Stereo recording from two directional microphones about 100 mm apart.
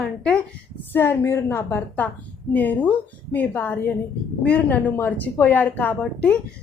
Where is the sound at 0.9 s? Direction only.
25° left (ahead or behind).